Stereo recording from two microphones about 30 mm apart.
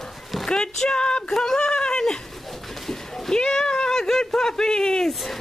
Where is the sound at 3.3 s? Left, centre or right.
Left.